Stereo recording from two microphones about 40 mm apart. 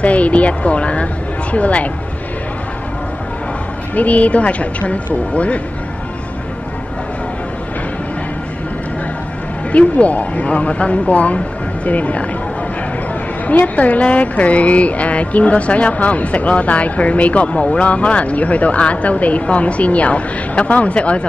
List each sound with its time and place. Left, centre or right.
0.0 s speech: left
3.9 s speech: left
9.7 s speech: left
13.5 s speech: left